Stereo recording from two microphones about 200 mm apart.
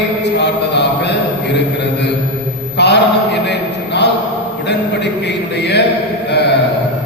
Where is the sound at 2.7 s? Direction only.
60° left (ahead or behind).